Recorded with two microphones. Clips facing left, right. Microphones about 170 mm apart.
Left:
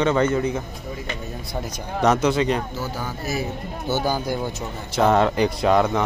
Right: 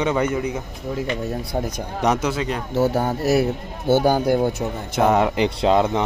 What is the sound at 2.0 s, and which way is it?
Speech, 10° right (ahead or behind).